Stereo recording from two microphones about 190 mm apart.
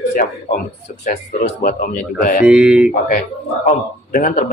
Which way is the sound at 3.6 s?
45° left (ahead or behind).